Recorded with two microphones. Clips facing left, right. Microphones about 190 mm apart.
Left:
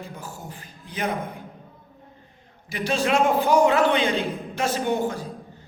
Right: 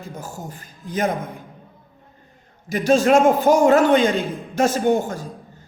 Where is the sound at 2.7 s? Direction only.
45° right (ahead or behind).